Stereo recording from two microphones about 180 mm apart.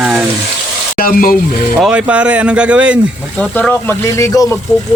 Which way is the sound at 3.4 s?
5° left (ahead or behind).